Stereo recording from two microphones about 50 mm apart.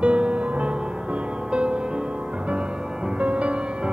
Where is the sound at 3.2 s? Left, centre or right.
Right.